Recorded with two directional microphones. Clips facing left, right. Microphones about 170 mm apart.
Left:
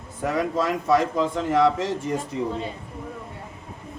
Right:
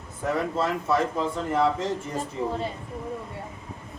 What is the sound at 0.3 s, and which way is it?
Speech, 90° left.